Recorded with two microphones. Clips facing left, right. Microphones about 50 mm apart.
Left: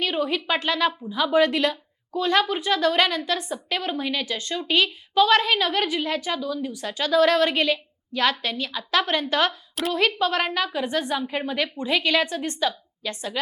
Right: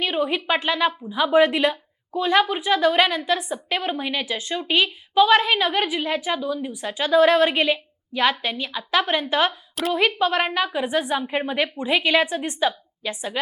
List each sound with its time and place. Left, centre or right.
0.0 s a woman's voice: centre